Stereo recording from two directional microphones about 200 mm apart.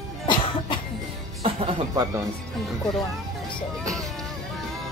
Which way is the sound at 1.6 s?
25° right (ahead or behind).